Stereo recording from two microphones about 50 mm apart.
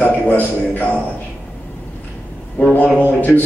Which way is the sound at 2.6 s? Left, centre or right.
Left.